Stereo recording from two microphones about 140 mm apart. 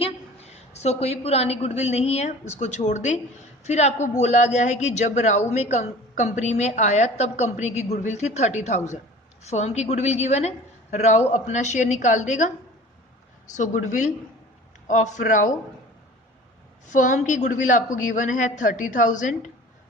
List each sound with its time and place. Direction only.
0.5 s a woman's voice: 50° left (ahead or behind)
13.6 s a woman's voice: 60° left (ahead or behind)
16.8 s a woman's voice: 65° left (ahead or behind)